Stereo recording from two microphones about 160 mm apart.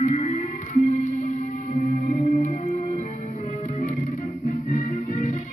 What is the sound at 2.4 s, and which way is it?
Music, 50° left (ahead or behind).